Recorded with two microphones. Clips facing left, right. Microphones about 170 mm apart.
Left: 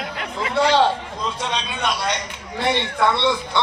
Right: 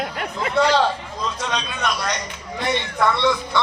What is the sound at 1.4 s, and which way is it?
A man's voice, 25° left (ahead or behind).